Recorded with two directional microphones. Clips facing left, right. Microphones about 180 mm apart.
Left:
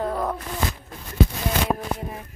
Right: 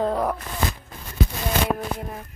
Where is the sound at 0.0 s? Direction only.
20° right (ahead or behind).